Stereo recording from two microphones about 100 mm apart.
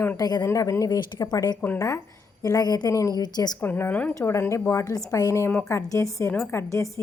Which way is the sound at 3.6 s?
20° left (ahead or behind).